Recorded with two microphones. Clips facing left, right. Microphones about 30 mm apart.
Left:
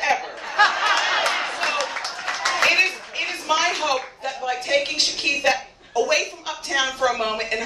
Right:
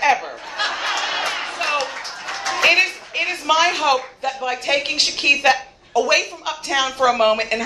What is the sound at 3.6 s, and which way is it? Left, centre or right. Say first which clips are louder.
A woman's voice: right 4 dB; right.